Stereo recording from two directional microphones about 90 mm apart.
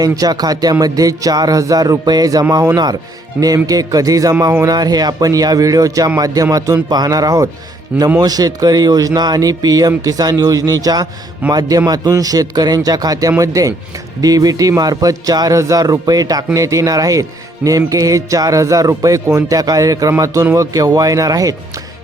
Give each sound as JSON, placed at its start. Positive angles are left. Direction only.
{"t": 0.0, "sound": "speech", "side_deg": -45}
{"t": 11.4, "sound": "a man's voice", "side_deg": -15}
{"t": 11.9, "sound": "speech", "side_deg": -45}